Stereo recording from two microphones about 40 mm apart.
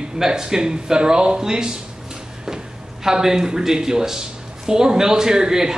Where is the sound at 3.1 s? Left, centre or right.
Centre.